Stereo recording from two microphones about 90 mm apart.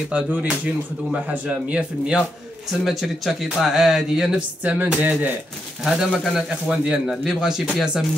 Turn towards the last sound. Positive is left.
turn(degrees=-5)  # may be behind; listen again after turning